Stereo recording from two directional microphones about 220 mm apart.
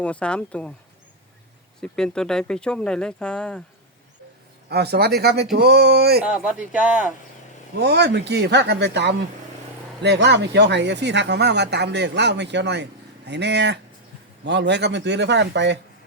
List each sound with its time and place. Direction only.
0.0 s speech: 5° left (ahead or behind)
1.8 s speech: 5° left (ahead or behind)
4.7 s speech: 50° right (ahead or behind)
6.2 s speech: 5° right (ahead or behind)
7.8 s speech: 50° right (ahead or behind)